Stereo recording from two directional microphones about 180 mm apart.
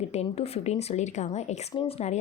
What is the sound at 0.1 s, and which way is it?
A woman's voice, 35° left (ahead or behind).